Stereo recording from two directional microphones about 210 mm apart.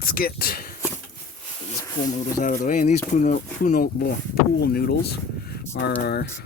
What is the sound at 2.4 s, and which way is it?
Speech, 40° left (ahead or behind).